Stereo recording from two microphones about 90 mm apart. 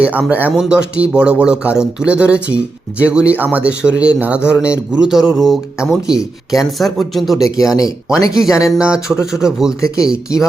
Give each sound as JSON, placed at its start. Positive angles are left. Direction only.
{"t": 0.0, "sound": "speech", "side_deg": -15}
{"t": 0.5, "sound": "speech", "side_deg": -5}
{"t": 7.3, "sound": "speech", "side_deg": 40}
{"t": 8.3, "sound": "speech", "side_deg": -5}
{"t": 9.8, "sound": "speech", "side_deg": 40}